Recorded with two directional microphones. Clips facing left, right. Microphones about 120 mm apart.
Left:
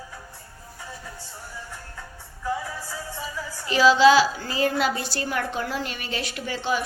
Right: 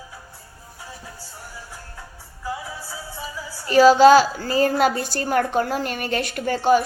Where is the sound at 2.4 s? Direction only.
10° right (ahead or behind).